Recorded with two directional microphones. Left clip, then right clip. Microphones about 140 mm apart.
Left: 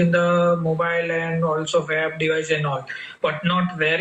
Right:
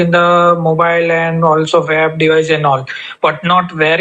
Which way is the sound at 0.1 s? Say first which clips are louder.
Right 11 dB; 35° right (ahead or behind).